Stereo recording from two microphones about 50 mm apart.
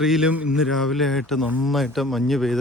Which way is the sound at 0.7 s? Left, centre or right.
Centre.